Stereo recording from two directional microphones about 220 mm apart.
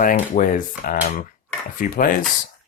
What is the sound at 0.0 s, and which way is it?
Speech, 40° left (ahead or behind).